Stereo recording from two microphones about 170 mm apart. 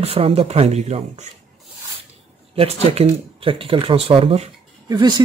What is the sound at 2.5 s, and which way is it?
Speech, 35° right (ahead or behind).